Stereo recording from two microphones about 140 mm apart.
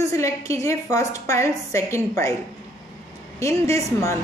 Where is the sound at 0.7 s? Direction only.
20° left (ahead or behind).